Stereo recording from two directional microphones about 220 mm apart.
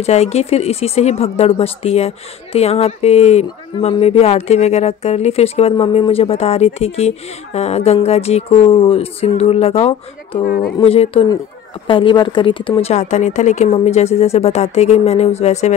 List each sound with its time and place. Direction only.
0.0 s speech: 30° left (ahead or behind)
10.4 s speech: 40° left (ahead or behind)
10.8 s speech: 25° left (ahead or behind)